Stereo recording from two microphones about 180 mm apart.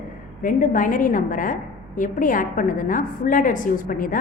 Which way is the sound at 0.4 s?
45° left (ahead or behind).